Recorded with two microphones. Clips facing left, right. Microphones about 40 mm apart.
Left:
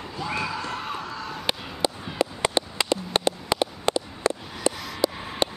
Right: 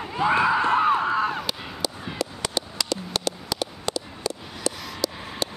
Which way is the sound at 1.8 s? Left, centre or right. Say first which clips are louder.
Left 4 dB; left.